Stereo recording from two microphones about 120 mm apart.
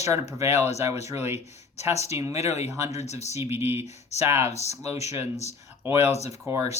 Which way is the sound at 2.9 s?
70° left (ahead or behind).